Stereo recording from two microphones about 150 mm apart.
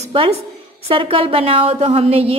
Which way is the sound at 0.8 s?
35° right (ahead or behind).